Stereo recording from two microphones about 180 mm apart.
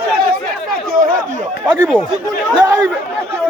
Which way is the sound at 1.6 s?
10° right (ahead or behind).